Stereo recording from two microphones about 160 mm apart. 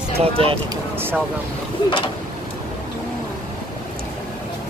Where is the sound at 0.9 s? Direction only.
15° right (ahead or behind).